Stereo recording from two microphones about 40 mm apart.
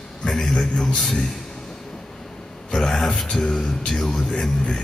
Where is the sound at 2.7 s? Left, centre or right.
Centre.